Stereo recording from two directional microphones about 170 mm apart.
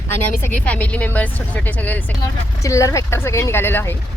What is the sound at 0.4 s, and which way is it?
A woman's voice, 10° left (ahead or behind).